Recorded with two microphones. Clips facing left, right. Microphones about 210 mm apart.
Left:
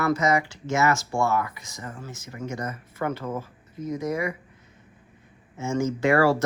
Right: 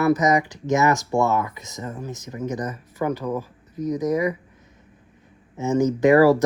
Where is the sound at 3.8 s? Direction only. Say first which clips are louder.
Right 6 dB; 20° right (ahead or behind).